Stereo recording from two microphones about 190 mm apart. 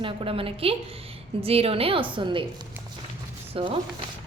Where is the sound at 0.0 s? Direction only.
30° right (ahead or behind).